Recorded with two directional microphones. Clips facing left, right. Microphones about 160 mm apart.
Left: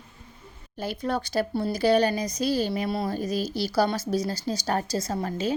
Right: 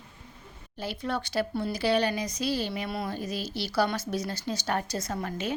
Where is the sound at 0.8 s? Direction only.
45° left (ahead or behind).